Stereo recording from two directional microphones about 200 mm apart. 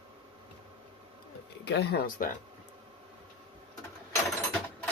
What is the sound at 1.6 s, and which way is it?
Speech, 55° left (ahead or behind).